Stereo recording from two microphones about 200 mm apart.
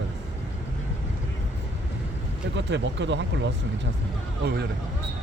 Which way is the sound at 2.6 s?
60° right (ahead or behind).